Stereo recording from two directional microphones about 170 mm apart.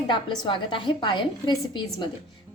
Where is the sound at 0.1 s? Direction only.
30° left (ahead or behind).